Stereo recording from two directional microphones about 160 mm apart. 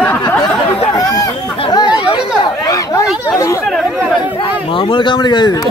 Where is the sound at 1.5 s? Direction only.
30° left (ahead or behind).